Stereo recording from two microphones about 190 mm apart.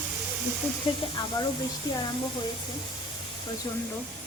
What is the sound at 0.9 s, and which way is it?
Speech, 25° left (ahead or behind).